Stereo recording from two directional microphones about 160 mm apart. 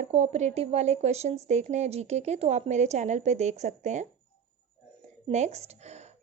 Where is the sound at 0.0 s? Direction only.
45° right (ahead or behind).